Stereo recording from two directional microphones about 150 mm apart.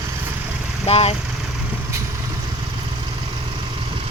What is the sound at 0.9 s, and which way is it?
Speech, 40° left (ahead or behind).